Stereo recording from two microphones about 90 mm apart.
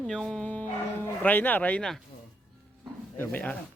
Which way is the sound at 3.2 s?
20° left (ahead or behind).